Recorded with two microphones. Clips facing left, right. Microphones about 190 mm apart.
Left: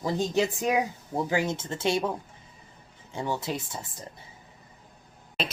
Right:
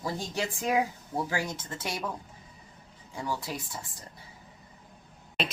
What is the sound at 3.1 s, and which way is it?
Speech, 25° left (ahead or behind).